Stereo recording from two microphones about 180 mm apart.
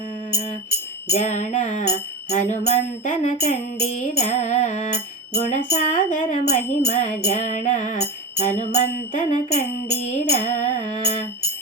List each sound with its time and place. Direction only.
1.1 s music: 40° left (ahead or behind)
5.3 s music: 65° left (ahead or behind)
5.7 s music: 45° left (ahead or behind)